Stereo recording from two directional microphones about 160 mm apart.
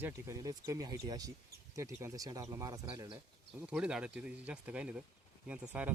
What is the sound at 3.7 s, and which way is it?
Speech, 5° right (ahead or behind).